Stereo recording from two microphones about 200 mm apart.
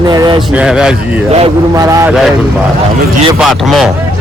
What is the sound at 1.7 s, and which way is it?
Speech, 15° right (ahead or behind).